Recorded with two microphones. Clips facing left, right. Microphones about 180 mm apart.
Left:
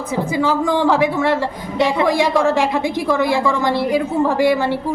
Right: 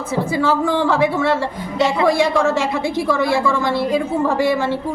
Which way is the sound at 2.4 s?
15° left (ahead or behind).